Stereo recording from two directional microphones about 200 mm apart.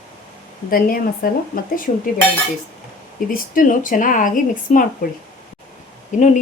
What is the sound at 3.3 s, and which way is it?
Speech, 40° left (ahead or behind).